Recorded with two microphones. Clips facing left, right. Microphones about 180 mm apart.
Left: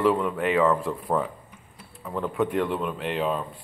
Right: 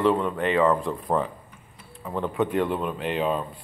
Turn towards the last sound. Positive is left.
turn(degrees=0)  # may be behind; listen again after turning